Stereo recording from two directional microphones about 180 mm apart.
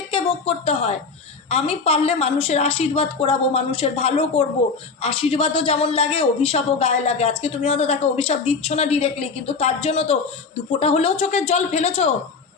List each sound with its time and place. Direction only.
0.1 s a woman's voice: 30° left (ahead or behind)